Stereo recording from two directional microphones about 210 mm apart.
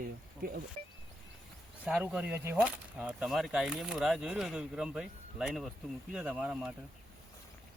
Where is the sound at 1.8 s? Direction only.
5° right (ahead or behind).